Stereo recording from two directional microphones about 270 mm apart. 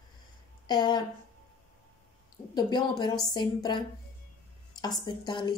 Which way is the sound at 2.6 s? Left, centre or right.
Centre.